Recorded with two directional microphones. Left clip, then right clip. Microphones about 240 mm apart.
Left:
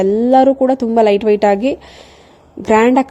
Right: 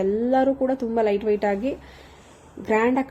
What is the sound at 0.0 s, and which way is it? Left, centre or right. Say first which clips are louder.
A woman's voice: left 10 dB; left.